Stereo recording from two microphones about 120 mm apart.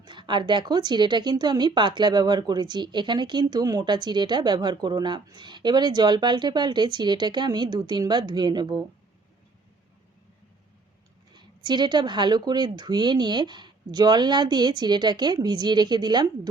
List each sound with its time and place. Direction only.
0.0 s a woman's voice: 40° right (ahead or behind)
11.3 s a woman's voice: 40° right (ahead or behind)